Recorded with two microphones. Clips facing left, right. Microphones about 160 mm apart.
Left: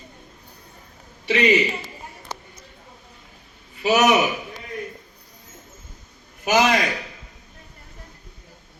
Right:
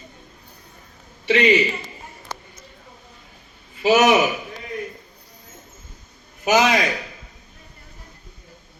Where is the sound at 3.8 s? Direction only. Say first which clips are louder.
Right 2 dB; 30° right (ahead or behind).